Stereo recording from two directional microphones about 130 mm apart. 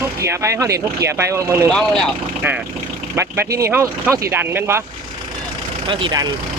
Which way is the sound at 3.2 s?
20° right (ahead or behind).